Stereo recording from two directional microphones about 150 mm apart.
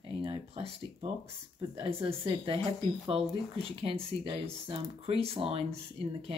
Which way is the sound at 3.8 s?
40° right (ahead or behind).